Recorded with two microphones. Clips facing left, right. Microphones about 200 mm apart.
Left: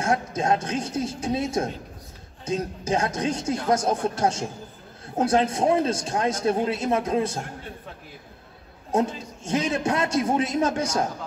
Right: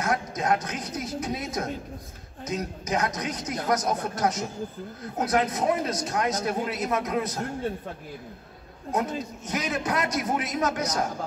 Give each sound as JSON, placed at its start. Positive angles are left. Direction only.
{"t": 0.0, "sound": "a man's voice", "side_deg": 25}
{"t": 8.9, "sound": "a man's voice", "side_deg": 30}